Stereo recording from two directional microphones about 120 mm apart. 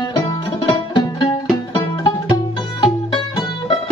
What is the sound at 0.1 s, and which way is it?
Music, 40° left (ahead or behind).